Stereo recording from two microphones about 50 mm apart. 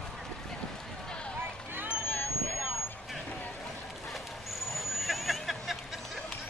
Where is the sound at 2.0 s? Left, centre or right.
Left.